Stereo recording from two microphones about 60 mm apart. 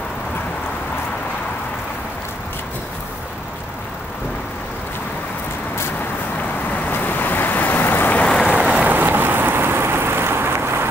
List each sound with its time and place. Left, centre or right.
6.7 s vehicle: left
8.5 s boat: centre
8.8 s rain: right